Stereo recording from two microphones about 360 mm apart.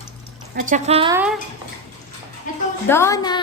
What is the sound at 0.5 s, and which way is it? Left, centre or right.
Speech, right.